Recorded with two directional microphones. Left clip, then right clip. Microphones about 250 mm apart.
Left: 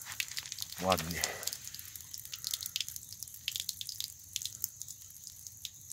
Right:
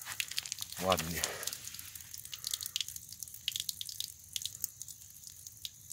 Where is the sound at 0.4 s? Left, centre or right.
Right.